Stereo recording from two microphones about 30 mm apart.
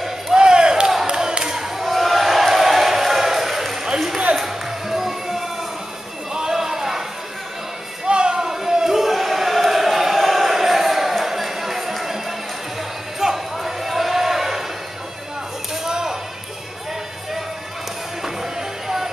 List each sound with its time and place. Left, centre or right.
0.4 s a sound: right; by 3.8 s centre
4.8 s music: centre
6.3 s basketball bounce: centre
8.1 s music: right
8.4 s a sound: centre
9.1 s chant: centre
13.2 s a sound: centre
15.7 s whip: centre
18.2 s music: centre